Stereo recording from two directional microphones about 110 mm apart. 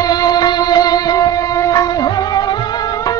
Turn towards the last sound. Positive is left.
turn(degrees=35)  # may be behind; listen again after turning